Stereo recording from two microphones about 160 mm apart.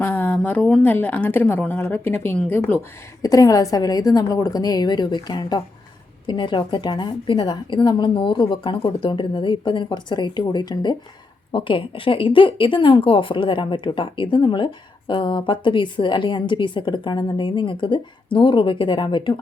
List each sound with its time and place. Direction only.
0.0 s a woman's voice: 10° left (ahead or behind); by 19.4 s 30° left (ahead or behind)